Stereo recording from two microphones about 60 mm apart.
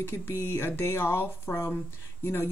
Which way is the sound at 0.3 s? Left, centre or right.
Left.